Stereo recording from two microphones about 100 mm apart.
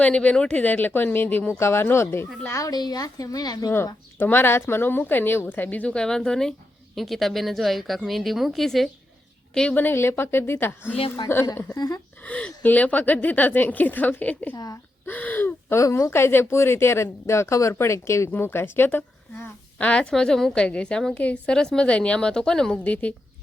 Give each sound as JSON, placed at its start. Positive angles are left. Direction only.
{"t": 0.0, "sound": "speech", "side_deg": 15}
{"t": 4.2, "sound": "speech", "side_deg": 20}
{"t": 9.6, "sound": "speech", "side_deg": 15}
{"t": 10.9, "sound": "a woman's voice", "side_deg": 70}
{"t": 11.7, "sound": "speech", "side_deg": 35}
{"t": 12.2, "sound": "a woman's voice", "side_deg": 15}
{"t": 14.5, "sound": "speech", "side_deg": 40}
{"t": 15.0, "sound": "gasp", "side_deg": 15}
{"t": 15.8, "sound": "speech", "side_deg": 30}
{"t": 19.8, "sound": "a woman's voice", "side_deg": 10}